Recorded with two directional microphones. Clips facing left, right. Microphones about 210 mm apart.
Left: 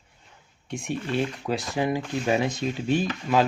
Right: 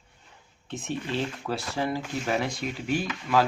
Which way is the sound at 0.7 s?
15° left (ahead or behind).